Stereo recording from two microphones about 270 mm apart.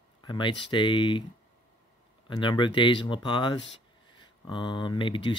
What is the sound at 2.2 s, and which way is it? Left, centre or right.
Speech, centre.